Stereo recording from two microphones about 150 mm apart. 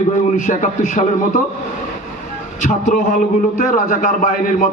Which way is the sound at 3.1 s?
65° left (ahead or behind).